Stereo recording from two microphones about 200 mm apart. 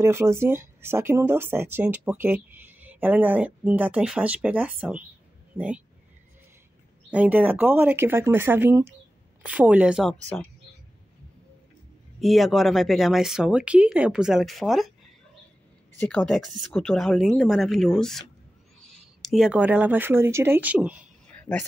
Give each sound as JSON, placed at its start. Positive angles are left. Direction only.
{"t": 0.0, "sound": "speech", "side_deg": -15}
{"t": 7.1, "sound": "speech", "side_deg": -10}
{"t": 12.2, "sound": "speech", "side_deg": 0}
{"t": 16.0, "sound": "speech", "side_deg": 5}
{"t": 19.2, "sound": "speech", "side_deg": 0}
{"t": 21.3, "sound": "a sound", "side_deg": 5}